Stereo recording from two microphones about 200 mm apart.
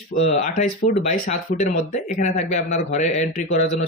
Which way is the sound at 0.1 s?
40° left (ahead or behind).